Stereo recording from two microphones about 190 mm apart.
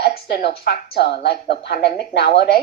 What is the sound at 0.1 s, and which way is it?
A woman's voice, 55° left (ahead or behind).